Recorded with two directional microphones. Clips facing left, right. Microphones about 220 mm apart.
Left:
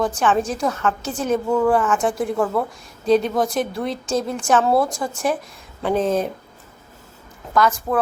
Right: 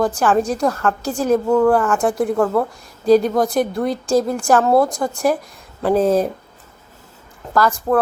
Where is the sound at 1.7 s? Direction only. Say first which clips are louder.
Right 2 dB; centre (ahead or behind).